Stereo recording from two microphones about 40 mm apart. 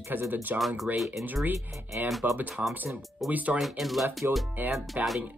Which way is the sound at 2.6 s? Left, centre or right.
Right.